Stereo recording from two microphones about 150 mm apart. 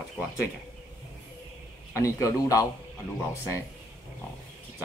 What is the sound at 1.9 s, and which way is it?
Speech, 20° left (ahead or behind).